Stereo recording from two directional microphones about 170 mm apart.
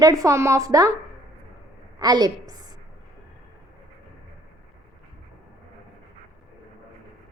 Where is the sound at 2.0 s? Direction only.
25° right (ahead or behind).